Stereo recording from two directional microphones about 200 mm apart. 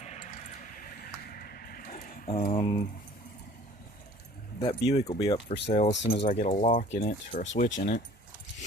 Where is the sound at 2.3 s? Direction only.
30° left (ahead or behind).